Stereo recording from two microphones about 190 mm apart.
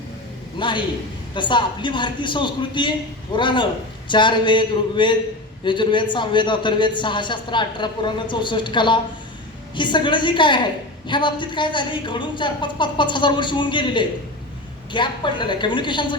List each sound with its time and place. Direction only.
0.6 s a man's voice: 25° left (ahead or behind)